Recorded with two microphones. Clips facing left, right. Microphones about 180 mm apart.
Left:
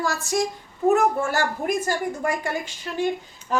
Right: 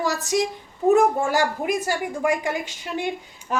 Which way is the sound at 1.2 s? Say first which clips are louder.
Right 2 dB; 15° right (ahead or behind).